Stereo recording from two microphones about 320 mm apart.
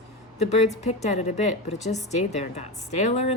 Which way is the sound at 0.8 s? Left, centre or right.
Left.